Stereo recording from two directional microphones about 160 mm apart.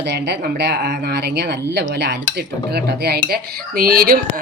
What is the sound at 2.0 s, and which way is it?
Dishes, 90° right.